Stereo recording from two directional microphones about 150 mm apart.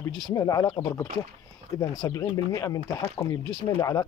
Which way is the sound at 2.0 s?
25° left (ahead or behind).